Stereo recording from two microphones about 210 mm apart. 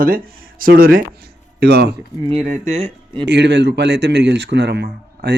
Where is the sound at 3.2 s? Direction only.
55° right (ahead or behind).